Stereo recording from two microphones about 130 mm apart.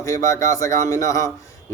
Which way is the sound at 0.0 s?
25° left (ahead or behind).